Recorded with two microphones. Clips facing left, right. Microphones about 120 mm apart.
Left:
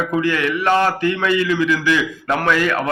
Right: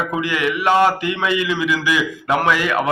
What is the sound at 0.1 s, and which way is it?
A man's voice, 15° right (ahead or behind).